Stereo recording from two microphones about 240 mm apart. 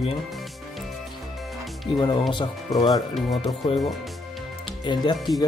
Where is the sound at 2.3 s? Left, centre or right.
Centre.